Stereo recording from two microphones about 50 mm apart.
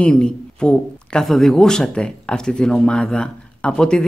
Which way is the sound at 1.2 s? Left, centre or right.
Centre.